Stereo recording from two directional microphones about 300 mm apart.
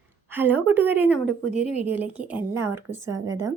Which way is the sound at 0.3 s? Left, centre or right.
Centre.